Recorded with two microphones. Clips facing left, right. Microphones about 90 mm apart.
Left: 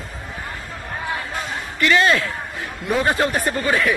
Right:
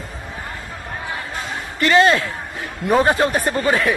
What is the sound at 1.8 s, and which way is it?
Speech, 30° right (ahead or behind).